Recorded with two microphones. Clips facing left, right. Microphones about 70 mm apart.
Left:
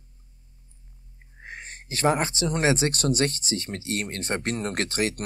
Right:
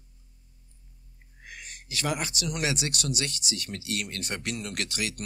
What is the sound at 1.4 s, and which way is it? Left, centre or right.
Speech, left.